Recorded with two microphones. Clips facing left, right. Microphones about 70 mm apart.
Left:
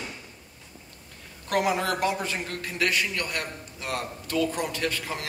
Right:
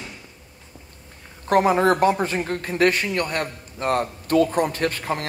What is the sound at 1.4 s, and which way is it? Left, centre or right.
A man's voice, right.